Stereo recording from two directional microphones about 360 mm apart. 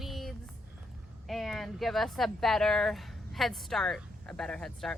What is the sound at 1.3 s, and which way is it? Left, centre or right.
Speech, centre.